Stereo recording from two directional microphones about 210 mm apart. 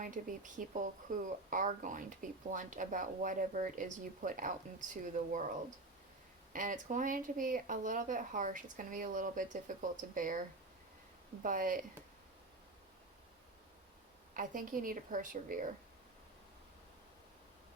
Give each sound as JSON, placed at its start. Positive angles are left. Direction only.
{"t": 0.0, "sound": "speech", "side_deg": -40}
{"t": 6.5, "sound": "speech", "side_deg": -40}
{"t": 11.4, "sound": "speech", "side_deg": -40}
{"t": 14.3, "sound": "speech", "side_deg": -40}